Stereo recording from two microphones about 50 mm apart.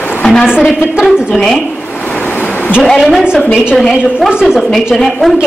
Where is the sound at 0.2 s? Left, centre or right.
Centre.